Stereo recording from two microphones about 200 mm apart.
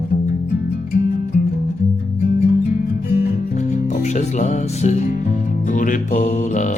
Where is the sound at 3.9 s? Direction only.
35° left (ahead or behind).